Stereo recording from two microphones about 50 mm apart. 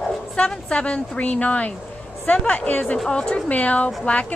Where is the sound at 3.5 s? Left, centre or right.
Left.